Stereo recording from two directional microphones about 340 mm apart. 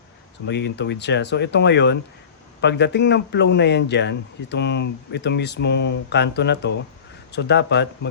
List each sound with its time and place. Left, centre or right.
0.4 s a man's voice: left